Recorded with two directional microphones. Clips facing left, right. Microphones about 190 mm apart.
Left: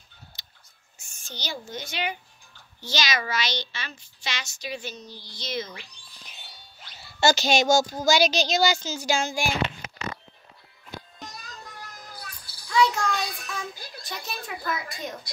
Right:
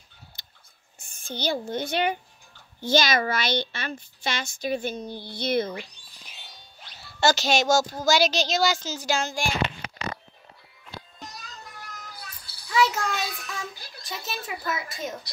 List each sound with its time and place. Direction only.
0.4 s whispering: 55° right (ahead or behind)
1.2 s a child's voice: 55° right (ahead or behind)
7.0 s speech: centre (ahead or behind)
12.6 s child singing: 5° right (ahead or behind)
14.0 s a sound: centre (ahead or behind)
14.7 s speech: centre (ahead or behind)